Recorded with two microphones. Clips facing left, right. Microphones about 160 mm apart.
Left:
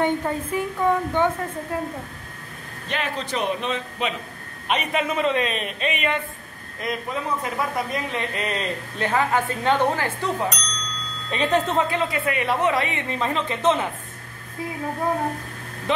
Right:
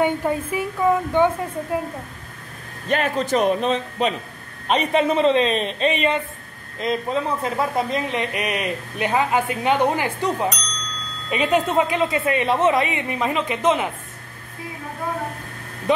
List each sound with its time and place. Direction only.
0.0 s speech: 10° right (ahead or behind)
2.9 s a man's voice: 45° right (ahead or behind); by 10.3 s 15° right (ahead or behind)
10.5 s speech: centre (ahead or behind)
11.4 s speech: 10° right (ahead or behind)